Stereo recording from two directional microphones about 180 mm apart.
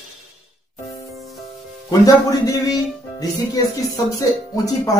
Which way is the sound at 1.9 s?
20° left (ahead or behind).